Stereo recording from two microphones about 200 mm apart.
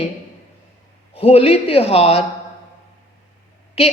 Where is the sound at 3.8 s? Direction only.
30° left (ahead or behind).